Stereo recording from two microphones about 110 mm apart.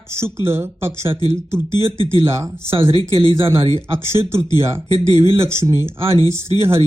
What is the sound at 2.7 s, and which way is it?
Speech, 55° right (ahead or behind).